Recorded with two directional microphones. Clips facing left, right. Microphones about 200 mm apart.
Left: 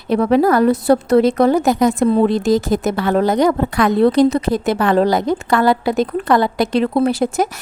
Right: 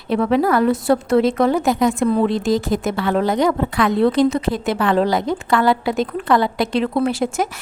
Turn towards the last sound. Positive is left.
turn(degrees=40)  # may be behind; listen again after turning